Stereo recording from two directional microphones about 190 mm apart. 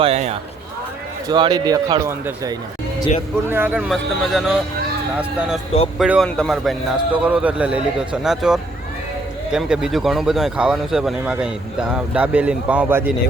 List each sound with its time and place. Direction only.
0.0 s speech: 35° right (ahead or behind)
1.3 s speech: 25° right (ahead or behind)